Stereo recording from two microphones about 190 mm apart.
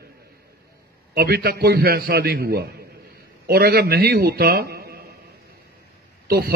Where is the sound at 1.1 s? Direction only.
55° right (ahead or behind).